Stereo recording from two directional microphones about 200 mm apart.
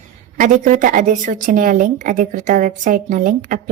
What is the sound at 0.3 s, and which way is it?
Speech, 40° right (ahead or behind).